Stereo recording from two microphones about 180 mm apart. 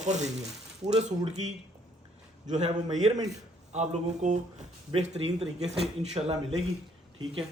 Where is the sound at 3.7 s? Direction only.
40° right (ahead or behind).